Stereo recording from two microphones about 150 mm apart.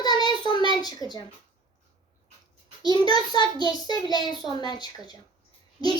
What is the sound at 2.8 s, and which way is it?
A child's voice, 25° left (ahead or behind).